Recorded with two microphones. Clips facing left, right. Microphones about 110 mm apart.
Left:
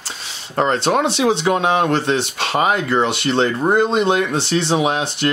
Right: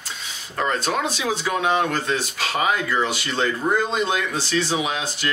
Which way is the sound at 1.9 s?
25° left (ahead or behind).